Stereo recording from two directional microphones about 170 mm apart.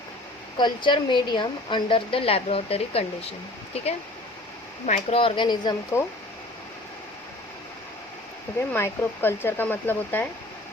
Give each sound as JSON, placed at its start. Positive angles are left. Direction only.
{"t": 0.5, "sound": "a woman's voice", "side_deg": 25}
{"t": 4.9, "sound": "speech", "side_deg": 30}
{"t": 8.7, "sound": "speech", "side_deg": 15}